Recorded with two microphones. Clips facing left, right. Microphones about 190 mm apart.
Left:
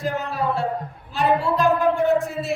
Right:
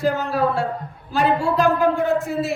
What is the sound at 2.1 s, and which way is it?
Speech, centre (ahead or behind).